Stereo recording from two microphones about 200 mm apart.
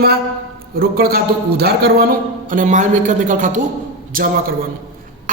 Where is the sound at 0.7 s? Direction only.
50° right (ahead or behind).